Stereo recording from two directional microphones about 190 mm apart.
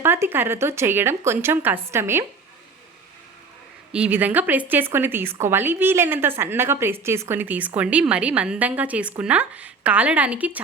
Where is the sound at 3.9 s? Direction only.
5° right (ahead or behind).